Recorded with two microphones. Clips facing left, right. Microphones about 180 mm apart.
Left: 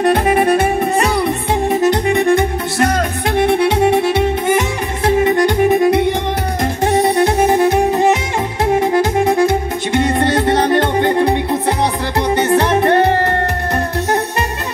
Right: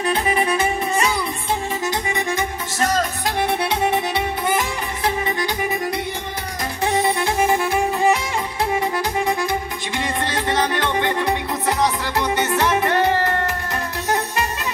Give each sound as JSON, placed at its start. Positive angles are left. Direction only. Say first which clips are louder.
{"t": 0.0, "sound": "music", "louder": "left 8 dB", "side_deg": 60}
{"t": 6.8, "sound": "music", "louder": "left 6 dB", "side_deg": 45}
{"t": 12.4, "sound": "music", "louder": "left 7 dB", "side_deg": 60}